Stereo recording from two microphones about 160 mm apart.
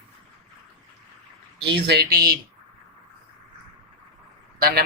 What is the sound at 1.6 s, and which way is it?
Speech, 90° right.